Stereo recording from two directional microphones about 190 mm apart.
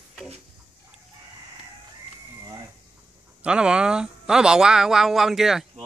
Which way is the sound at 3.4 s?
5° right (ahead or behind).